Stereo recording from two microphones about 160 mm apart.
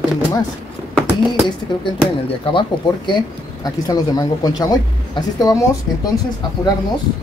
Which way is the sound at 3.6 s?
25° left (ahead or behind).